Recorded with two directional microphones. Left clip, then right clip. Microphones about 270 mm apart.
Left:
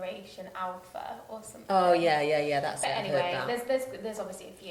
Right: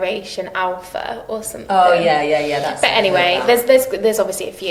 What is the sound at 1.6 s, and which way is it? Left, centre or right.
Speech, left.